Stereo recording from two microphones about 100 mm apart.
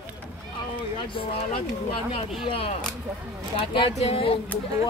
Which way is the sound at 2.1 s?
70° left (ahead or behind).